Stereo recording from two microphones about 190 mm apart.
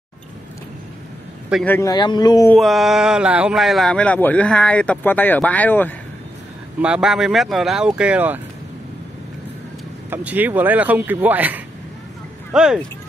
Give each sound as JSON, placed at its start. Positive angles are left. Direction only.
{"t": 1.5, "sound": "speech", "side_deg": 10}
{"t": 1.9, "sound": "speech", "side_deg": 20}
{"t": 2.5, "sound": "speech", "side_deg": 0}
{"t": 6.8, "sound": "speech", "side_deg": -5}
{"t": 10.0, "sound": "speech", "side_deg": -10}